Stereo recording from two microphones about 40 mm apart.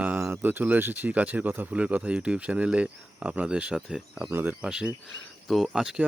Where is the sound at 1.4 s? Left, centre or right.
Right.